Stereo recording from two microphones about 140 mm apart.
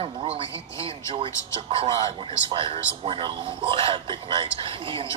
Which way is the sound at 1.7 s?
40° right (ahead or behind).